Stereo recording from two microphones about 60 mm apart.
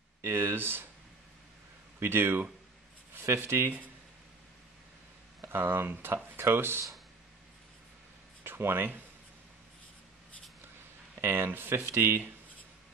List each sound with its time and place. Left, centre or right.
0.2 s speech: right
2.0 s speech: right
5.4 s speech: right
8.5 s speech: right
11.1 s speech: right